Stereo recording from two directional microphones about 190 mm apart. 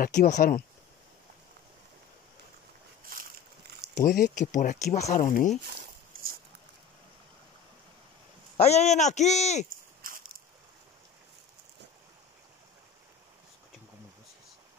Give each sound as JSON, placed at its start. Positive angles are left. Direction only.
{"t": 0.0, "sound": "speech", "side_deg": 45}
{"t": 3.1, "sound": "boat", "side_deg": -50}
{"t": 4.0, "sound": "speech", "side_deg": 45}
{"t": 8.5, "sound": "speech", "side_deg": 35}
{"t": 9.7, "sound": "a sound", "side_deg": -45}